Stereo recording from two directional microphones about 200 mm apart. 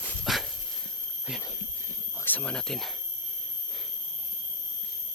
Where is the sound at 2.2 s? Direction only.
5° left (ahead or behind).